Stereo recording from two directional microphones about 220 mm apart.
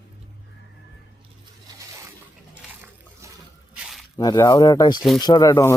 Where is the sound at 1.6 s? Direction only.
15° right (ahead or behind).